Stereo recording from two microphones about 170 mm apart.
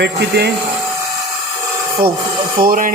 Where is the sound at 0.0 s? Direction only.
75° right (ahead or behind).